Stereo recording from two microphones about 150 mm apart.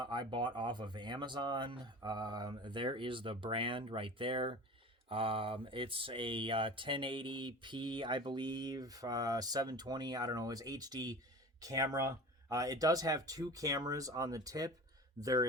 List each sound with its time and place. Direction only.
0.0 s speech: 30° right (ahead or behind)